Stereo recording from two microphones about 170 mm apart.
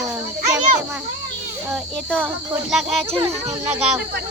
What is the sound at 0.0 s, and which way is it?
Insect, 20° right (ahead or behind).